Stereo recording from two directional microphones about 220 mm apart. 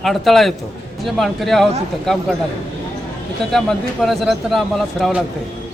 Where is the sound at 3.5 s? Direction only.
Centre (ahead or behind).